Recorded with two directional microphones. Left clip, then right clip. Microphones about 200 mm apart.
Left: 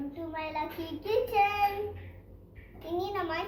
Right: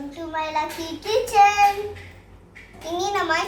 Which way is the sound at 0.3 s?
15° right (ahead or behind).